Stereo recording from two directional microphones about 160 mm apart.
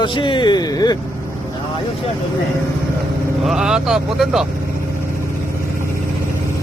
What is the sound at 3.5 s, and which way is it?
Speech, 5° right (ahead or behind).